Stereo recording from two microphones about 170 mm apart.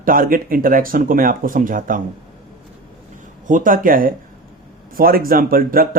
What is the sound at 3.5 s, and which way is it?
Speech, 50° right (ahead or behind).